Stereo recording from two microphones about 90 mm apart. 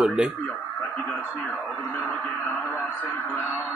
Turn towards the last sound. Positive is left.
turn(degrees=20)  # may be behind; listen again after turning